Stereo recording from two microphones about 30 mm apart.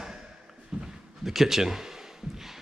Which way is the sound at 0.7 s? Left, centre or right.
Right.